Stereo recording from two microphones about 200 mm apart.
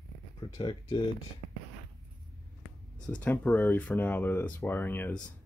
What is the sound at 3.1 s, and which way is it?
Speech, 10° left (ahead or behind).